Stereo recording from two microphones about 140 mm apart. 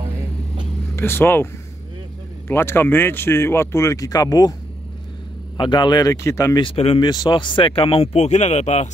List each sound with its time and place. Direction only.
0.9 s speech: 15° left (ahead or behind)
5.6 s speech: 35° left (ahead or behind)
6.6 s speech: 45° left (ahead or behind)